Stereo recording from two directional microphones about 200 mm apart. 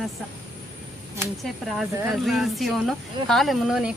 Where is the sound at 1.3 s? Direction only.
Centre (ahead or behind).